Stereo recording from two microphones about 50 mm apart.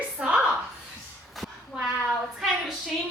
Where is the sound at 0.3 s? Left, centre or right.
Right.